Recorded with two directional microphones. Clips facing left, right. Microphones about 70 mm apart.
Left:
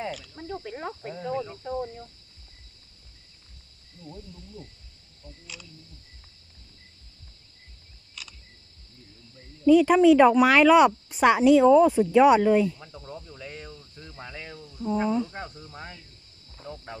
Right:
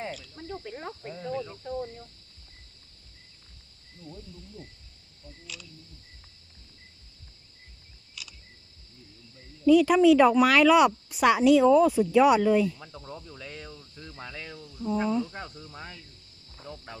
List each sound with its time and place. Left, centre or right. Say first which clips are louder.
0.3 s speech: left 3 dB; left
8.1 s camera: left 1 dB; left
9.6 s speech: left 2 dB; left
12.7 s speech: left 1 dB; centre
13.4 s speech: left 1 dB; centre